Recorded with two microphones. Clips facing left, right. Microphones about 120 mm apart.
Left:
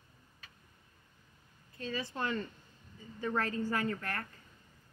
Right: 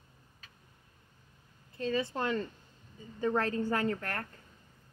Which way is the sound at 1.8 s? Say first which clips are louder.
Right 5 dB; 30° right (ahead or behind).